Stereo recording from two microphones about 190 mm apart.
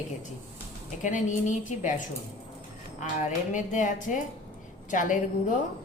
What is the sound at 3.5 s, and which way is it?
A woman's voice, 40° left (ahead or behind).